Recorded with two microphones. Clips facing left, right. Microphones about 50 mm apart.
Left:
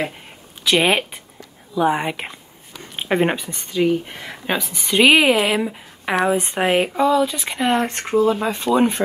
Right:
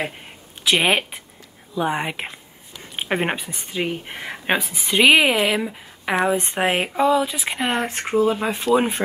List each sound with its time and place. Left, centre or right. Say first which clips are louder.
0.7 s a woman's voice: left 2 dB; centre; by 4.6 s right
4.6 s a woman's voice: left 3 dB; centre
6.5 s a woman's voice: left 3 dB; centre